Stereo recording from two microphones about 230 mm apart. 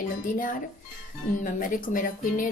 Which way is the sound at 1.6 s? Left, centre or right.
Left.